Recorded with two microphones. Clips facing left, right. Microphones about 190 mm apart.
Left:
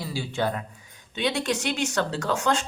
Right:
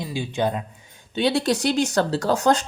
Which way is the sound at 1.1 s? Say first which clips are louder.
Right 5 dB; 35° right (ahead or behind).